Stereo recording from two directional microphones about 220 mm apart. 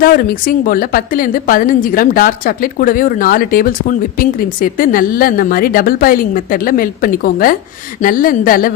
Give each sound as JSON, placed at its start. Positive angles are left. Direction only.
{"t": 0.0, "sound": "a woman's voice", "side_deg": 40}